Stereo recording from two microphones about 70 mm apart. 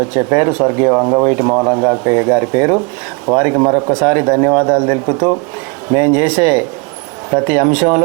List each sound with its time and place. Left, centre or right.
0.0 s speech: right
3.9 s speech: right